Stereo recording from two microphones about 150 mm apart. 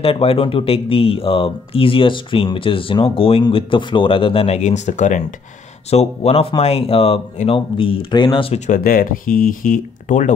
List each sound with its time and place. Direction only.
0.0 s speech: 40° left (ahead or behind); by 5.2 s 55° left (ahead or behind)
5.9 s speech: 45° left (ahead or behind)
8.5 s speech: 50° left (ahead or behind)
8.8 s speech: 70° left (ahead or behind)